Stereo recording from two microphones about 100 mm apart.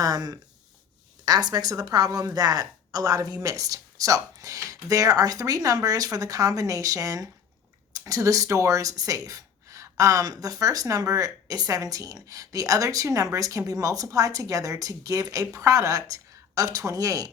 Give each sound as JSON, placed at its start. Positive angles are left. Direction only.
{"t": 0.0, "sound": "speech", "side_deg": -40}